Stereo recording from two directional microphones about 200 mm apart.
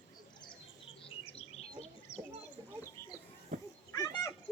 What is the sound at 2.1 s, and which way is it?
Bird, 15° left (ahead or behind).